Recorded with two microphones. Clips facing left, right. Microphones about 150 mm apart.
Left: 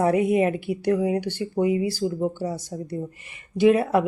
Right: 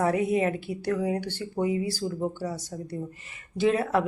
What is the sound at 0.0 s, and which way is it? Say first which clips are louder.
Speech: left 4 dB; 20° left (ahead or behind).